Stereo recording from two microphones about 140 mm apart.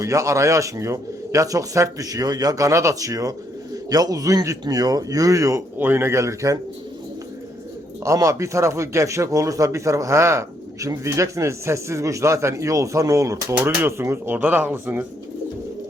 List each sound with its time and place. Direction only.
0.0 s speech: 20° right (ahead or behind)
8.0 s speech: 25° right (ahead or behind)